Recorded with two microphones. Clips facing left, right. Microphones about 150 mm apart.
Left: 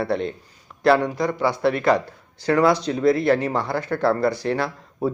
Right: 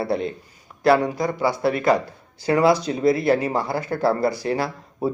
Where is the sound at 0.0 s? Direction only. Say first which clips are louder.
Even; 5° right (ahead or behind).